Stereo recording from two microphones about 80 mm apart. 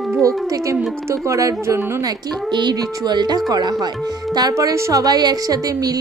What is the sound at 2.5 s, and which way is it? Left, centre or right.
Speech, right.